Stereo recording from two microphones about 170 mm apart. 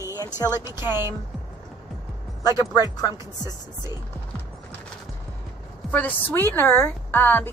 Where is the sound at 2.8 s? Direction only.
20° left (ahead or behind).